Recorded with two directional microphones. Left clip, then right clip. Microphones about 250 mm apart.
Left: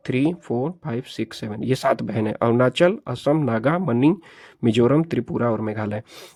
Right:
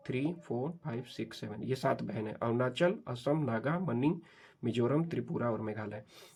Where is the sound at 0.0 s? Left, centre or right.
Left.